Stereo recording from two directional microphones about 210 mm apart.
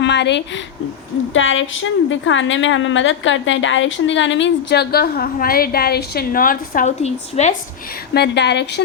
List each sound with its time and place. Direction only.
0.0 s a woman's voice: 55° left (ahead or behind)
1.3 s a woman's voice: 65° left (ahead or behind); by 7.5 s 30° left (ahead or behind)
8.1 s speech: 50° left (ahead or behind)